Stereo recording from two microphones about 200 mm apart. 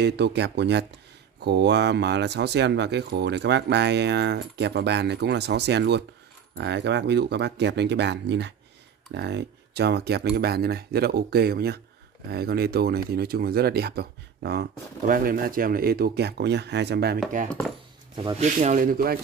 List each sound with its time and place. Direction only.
0.0 s speech: 55° right (ahead or behind)
18.4 s speech: 35° right (ahead or behind)